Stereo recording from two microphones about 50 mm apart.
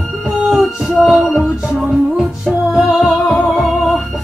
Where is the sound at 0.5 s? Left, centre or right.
Centre.